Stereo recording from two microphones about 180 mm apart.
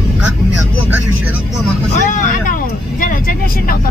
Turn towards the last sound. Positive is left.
turn(degrees=50)  # may be behind; listen again after turning